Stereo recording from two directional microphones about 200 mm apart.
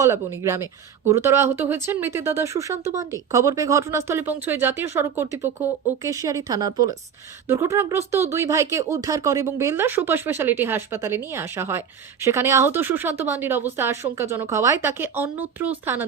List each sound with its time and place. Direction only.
0.0 s speech: 15° right (ahead or behind)